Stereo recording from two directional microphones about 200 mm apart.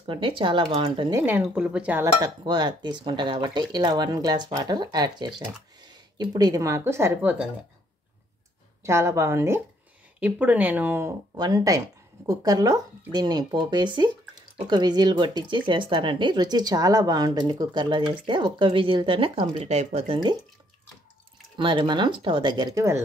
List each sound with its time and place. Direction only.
0.0 s speech: 25° right (ahead or behind)
1.2 s speech: 10° right (ahead or behind)
2.4 s speech: 20° right (ahead or behind)
8.8 s speech: 15° right (ahead or behind); by 20.2 s 35° right (ahead or behind)
21.5 s speech: 25° right (ahead or behind)